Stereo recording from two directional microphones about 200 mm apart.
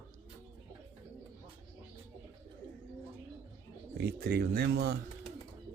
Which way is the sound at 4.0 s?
50° right (ahead or behind).